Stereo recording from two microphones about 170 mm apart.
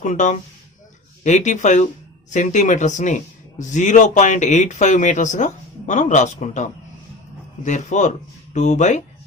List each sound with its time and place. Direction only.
0.0 s speech: 45° left (ahead or behind)